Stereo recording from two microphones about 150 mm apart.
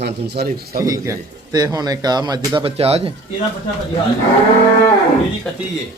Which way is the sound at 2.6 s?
40° right (ahead or behind).